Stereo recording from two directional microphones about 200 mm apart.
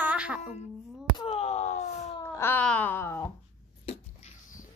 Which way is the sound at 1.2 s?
30° left (ahead or behind).